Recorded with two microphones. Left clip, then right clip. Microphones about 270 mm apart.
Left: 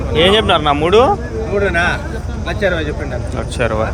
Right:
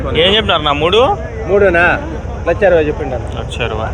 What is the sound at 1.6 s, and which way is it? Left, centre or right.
Speech, centre.